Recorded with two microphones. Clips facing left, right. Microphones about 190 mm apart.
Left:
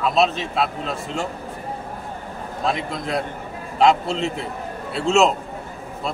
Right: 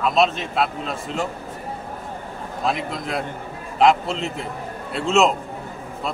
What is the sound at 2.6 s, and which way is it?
A man's voice, centre (ahead or behind).